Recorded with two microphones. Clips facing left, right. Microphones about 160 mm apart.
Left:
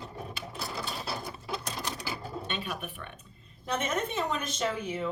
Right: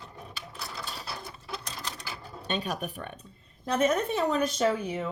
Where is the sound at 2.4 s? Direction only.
40° right (ahead or behind).